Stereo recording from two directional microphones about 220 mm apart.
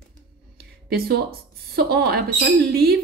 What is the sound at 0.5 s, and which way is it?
Speech, 45° right (ahead or behind).